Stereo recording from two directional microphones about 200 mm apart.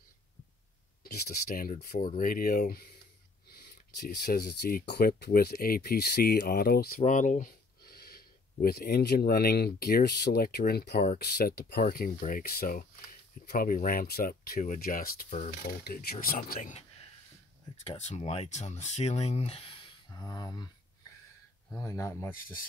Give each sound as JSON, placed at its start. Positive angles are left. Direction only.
{"t": 1.0, "sound": "speech", "side_deg": 45}
{"t": 7.0, "sound": "speech", "side_deg": 40}
{"t": 17.8, "sound": "speech", "side_deg": 35}
{"t": 21.7, "sound": "speech", "side_deg": 15}